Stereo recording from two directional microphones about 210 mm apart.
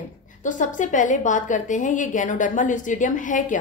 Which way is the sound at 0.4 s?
35° left (ahead or behind).